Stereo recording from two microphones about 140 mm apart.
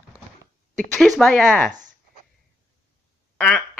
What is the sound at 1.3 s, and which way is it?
Speech, 10° left (ahead or behind).